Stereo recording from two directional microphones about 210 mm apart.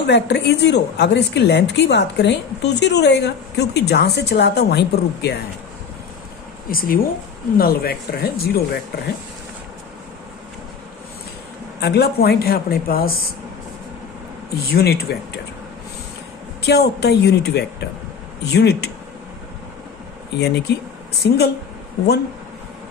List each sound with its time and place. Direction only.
0.1 s a woman's voice: 55° left (ahead or behind)
6.7 s a woman's voice: 45° left (ahead or behind)
11.8 s a woman's voice: 50° left (ahead or behind)
14.6 s a woman's voice: 50° left (ahead or behind)
16.6 s a woman's voice: 50° left (ahead or behind)
20.4 s a woman's voice: 50° left (ahead or behind)